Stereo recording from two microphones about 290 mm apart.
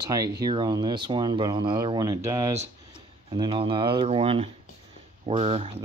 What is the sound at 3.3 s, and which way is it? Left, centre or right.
Speech, centre.